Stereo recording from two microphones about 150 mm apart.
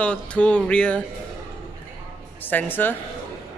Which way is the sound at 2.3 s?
10° left (ahead or behind).